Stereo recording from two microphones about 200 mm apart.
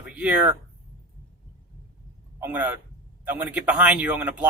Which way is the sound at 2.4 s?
10° right (ahead or behind).